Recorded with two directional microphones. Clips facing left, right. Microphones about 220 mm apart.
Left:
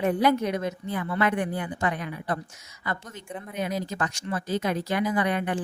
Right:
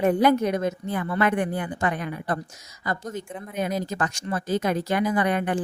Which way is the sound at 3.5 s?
45° right (ahead or behind).